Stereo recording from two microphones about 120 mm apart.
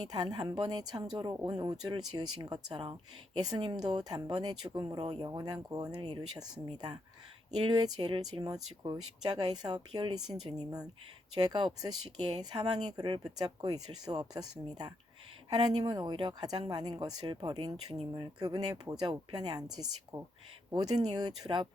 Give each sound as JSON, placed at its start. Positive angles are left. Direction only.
{"t": 0.0, "sound": "speech", "side_deg": -35}